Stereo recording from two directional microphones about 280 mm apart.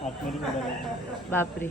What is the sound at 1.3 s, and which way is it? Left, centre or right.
Speech, centre.